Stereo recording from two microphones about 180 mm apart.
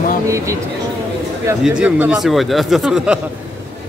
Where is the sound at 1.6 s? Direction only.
5° right (ahead or behind).